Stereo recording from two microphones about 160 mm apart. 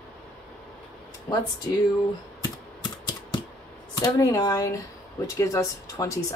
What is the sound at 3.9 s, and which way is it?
Speech, 20° left (ahead or behind).